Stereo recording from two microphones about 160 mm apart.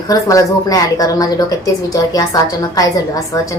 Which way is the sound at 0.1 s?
20° left (ahead or behind).